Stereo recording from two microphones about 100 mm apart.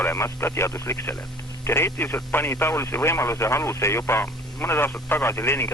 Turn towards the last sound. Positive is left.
turn(degrees=25)  # may be behind; listen again after turning